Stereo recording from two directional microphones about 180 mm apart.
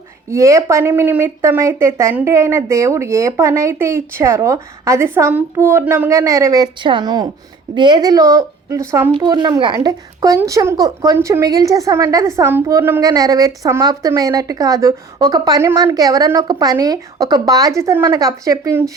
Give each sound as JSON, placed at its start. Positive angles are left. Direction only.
{"t": 0.3, "sound": "speech", "side_deg": -15}